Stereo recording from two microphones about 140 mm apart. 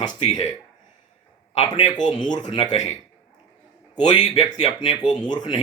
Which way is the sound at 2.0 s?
30° left (ahead or behind).